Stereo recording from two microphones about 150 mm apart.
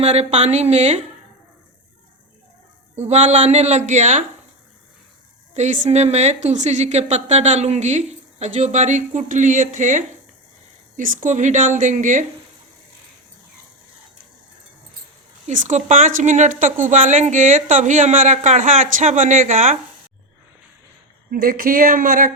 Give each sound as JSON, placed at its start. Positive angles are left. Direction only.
{"t": 0.0, "sound": "a woman's voice", "side_deg": -45}
{"t": 2.9, "sound": "a woman's voice", "side_deg": -50}
{"t": 5.5, "sound": "a woman's voice", "side_deg": -50}
{"t": 15.4, "sound": "speech", "side_deg": -55}
{"t": 21.2, "sound": "speech", "side_deg": -80}